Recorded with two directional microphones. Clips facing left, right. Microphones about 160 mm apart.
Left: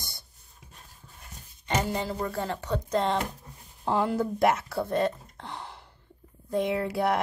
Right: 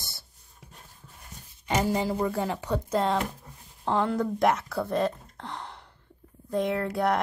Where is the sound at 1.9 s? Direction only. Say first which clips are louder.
Right 4 dB; 10° right (ahead or behind).